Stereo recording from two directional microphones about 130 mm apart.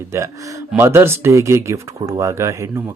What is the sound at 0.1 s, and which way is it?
Speech, 25° right (ahead or behind).